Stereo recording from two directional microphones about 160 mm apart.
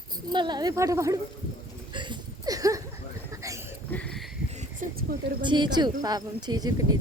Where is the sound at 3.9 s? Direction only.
5° left (ahead or behind).